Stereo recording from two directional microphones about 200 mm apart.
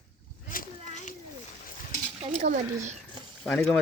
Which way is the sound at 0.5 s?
35° left (ahead or behind).